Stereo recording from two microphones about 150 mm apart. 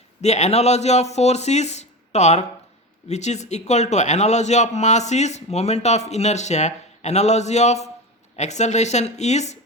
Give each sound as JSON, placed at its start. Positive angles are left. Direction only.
{"t": 0.2, "sound": "a man's voice", "side_deg": 50}